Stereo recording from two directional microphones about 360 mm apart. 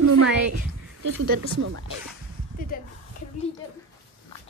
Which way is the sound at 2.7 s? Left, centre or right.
Left.